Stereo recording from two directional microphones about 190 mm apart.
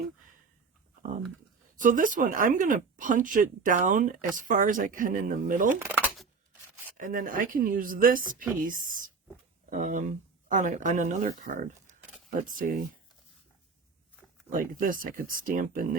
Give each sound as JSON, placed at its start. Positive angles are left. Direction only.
{"t": 1.7, "sound": "speech", "side_deg": -45}
{"t": 6.9, "sound": "speech", "side_deg": -45}
{"t": 14.5, "sound": "speech", "side_deg": -45}